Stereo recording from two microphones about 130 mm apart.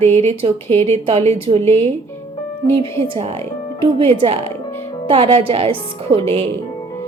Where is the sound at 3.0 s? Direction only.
50° right (ahead or behind).